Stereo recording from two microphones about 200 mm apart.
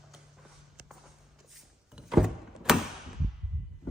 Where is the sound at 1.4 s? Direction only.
Centre (ahead or behind).